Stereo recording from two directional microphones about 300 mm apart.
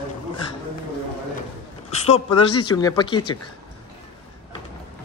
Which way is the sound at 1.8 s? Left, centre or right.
Left.